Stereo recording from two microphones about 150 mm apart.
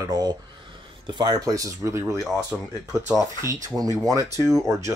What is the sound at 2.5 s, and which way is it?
Speech, centre (ahead or behind).